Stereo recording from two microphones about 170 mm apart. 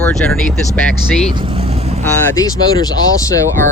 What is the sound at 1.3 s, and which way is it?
Vehicle, 30° right (ahead or behind).